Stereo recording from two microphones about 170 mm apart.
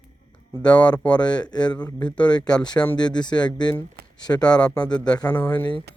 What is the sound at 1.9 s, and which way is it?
Speech, 5° left (ahead or behind).